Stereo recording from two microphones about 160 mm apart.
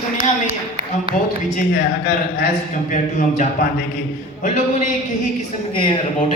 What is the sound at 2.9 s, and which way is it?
Speech, 55° left (ahead or behind).